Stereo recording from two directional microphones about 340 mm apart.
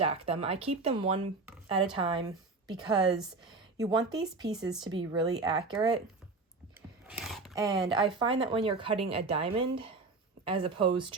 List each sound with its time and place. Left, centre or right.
0.0 s speech: centre
3.0 s speech: centre
7.1 s a sound: centre
7.5 s speech: centre